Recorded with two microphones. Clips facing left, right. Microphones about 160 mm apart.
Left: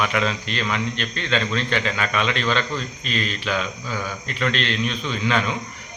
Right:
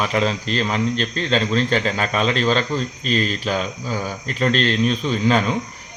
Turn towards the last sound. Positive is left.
turn(degrees=-35)  # may be behind; listen again after turning